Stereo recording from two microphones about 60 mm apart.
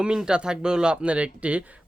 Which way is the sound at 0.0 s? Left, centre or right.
Centre.